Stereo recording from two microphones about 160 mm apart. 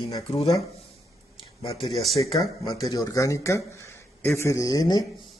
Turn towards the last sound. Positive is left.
turn(degrees=20)  # may be behind; listen again after turning